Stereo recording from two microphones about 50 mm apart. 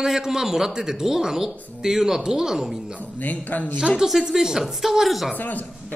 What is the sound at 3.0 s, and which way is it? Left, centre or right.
Speech, left.